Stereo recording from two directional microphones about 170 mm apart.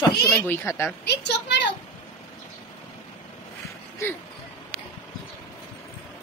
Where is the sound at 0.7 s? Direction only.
15° left (ahead or behind).